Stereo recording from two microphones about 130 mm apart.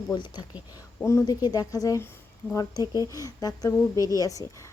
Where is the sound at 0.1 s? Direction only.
35° left (ahead or behind).